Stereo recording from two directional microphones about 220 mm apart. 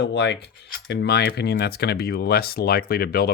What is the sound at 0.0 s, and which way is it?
Speech, 50° left (ahead or behind).